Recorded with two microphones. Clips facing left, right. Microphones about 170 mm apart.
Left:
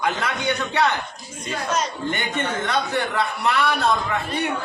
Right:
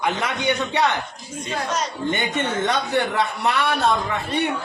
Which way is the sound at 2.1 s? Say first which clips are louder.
Right 4 dB; 20° right (ahead or behind).